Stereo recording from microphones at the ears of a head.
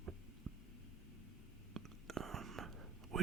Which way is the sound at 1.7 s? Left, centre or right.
Right.